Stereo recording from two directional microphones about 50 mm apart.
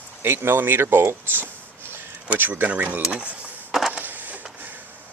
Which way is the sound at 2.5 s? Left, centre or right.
Right.